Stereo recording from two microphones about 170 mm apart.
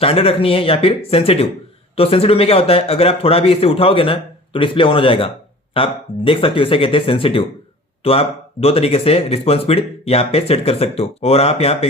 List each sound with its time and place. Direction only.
0.0 s speech: 35° left (ahead or behind)